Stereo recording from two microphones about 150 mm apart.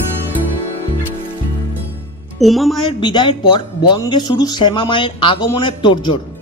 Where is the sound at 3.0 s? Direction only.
30° left (ahead or behind).